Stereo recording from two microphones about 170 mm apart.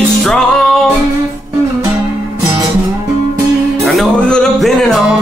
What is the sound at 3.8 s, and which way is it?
Music, centre (ahead or behind).